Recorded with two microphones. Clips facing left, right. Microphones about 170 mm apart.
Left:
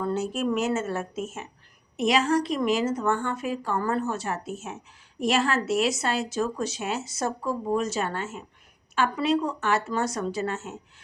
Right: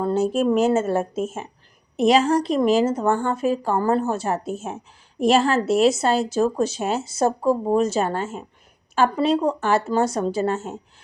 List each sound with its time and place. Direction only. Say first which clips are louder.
0.0 s a woman's voice: right 7 dB; 30° right (ahead or behind)